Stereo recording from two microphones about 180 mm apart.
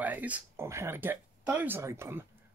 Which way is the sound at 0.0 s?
10° right (ahead or behind).